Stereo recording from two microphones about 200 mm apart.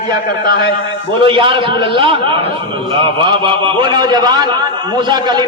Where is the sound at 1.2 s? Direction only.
25° right (ahead or behind).